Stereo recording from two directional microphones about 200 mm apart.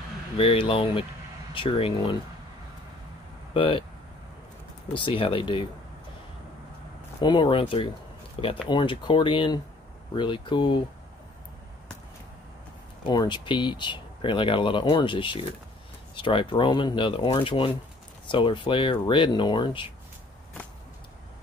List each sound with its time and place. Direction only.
0.4 s speech: 30° left (ahead or behind)
3.5 s speech: 25° left (ahead or behind)
4.9 s speech: 25° left (ahead or behind)
7.2 s speech: 25° left (ahead or behind)
13.0 s speech: 20° left (ahead or behind)